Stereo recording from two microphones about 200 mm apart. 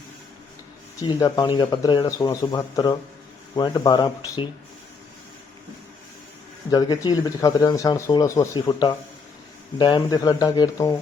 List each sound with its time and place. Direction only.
1.0 s speech: 20° left (ahead or behind)
6.7 s speech: 20° left (ahead or behind)